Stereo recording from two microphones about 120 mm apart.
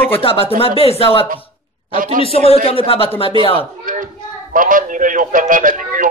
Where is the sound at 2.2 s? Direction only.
55° left (ahead or behind).